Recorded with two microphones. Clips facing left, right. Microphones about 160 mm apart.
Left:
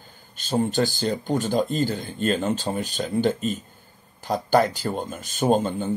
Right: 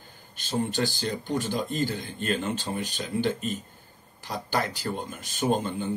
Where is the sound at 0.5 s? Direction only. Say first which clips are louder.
Left 5 dB; 35° left (ahead or behind).